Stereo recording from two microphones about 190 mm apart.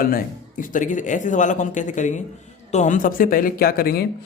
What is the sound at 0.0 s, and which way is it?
A man's voice, 50° left (ahead or behind).